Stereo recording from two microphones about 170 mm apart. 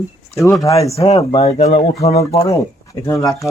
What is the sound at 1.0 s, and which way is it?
Speech, 35° left (ahead or behind).